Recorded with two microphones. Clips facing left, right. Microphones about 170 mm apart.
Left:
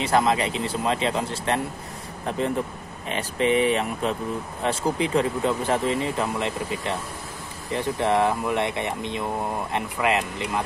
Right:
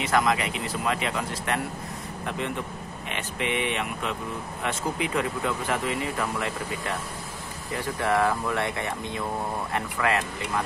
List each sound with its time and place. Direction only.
0.0 s speech: 30° left (ahead or behind)